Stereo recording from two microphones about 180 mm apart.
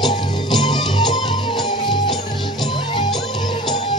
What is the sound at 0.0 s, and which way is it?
Music, 25° left (ahead or behind).